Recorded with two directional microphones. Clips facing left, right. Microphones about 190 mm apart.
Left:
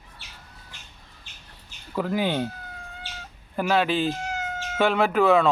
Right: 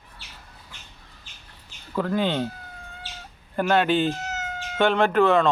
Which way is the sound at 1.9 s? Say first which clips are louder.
Right 1 dB; 10° left (ahead or behind).